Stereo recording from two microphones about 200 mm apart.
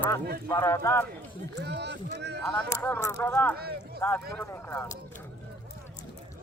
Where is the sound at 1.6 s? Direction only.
60° right (ahead or behind).